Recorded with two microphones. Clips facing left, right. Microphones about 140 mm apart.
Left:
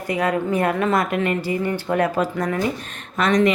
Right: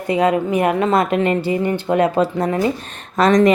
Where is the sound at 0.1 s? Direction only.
25° right (ahead or behind).